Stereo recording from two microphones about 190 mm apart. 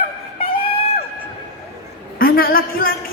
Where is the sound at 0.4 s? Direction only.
30° left (ahead or behind).